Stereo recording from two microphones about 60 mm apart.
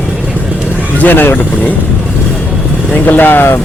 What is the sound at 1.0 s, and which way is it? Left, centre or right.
Speech, left.